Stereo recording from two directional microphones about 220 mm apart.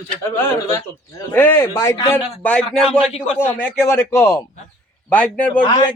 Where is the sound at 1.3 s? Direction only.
10° left (ahead or behind).